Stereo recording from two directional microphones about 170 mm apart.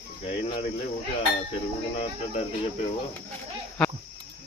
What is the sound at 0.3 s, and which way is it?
Speech, 35° left (ahead or behind).